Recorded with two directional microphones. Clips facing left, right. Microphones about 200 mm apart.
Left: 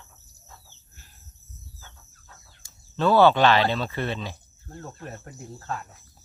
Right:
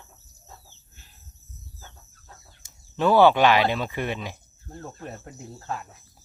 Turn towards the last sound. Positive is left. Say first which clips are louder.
# even
turn(degrees=-15)  # may be behind; listen again after turning